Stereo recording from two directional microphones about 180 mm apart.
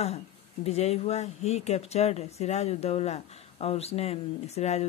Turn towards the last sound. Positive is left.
turn(degrees=35)  # may be behind; listen again after turning